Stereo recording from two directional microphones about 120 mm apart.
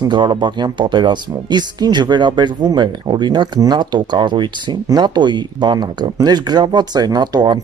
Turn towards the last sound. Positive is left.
turn(degrees=-35)  # may be behind; listen again after turning